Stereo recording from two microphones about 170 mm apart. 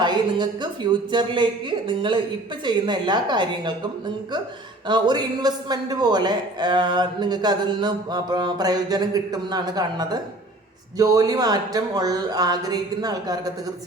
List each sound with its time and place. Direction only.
0.0 s a man's voice: 25° right (ahead or behind)
4.9 s a man's voice: 25° right (ahead or behind)